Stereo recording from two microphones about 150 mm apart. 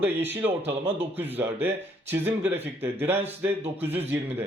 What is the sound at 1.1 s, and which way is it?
Speech, 15° right (ahead or behind).